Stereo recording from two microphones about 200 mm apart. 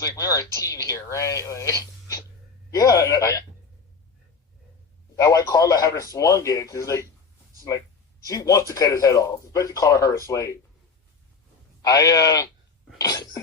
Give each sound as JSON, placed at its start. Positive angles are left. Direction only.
{"t": 0.0, "sound": "speech", "side_deg": 15}
{"t": 5.1, "sound": "speech", "side_deg": 15}
{"t": 8.3, "sound": "speech", "side_deg": 15}
{"t": 11.8, "sound": "speech", "side_deg": 20}
{"t": 13.0, "sound": "cough", "side_deg": 15}